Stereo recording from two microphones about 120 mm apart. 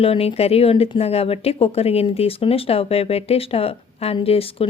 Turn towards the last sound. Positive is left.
turn(degrees=55)  # may be behind; listen again after turning